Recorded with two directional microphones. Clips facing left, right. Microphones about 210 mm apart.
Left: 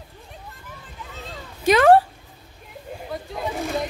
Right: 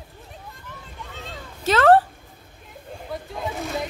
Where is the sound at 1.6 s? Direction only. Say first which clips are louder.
Left 2 dB; 15° left (ahead or behind).